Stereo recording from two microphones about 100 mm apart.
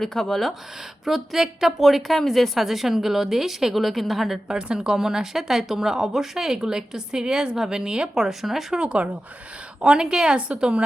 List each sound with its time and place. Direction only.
0.0 s a woman's voice: 5° left (ahead or behind)